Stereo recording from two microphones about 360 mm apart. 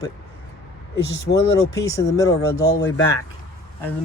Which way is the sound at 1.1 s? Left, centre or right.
Left.